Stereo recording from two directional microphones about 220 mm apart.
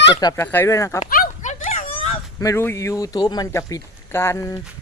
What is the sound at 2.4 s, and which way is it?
Speech, 15° left (ahead or behind).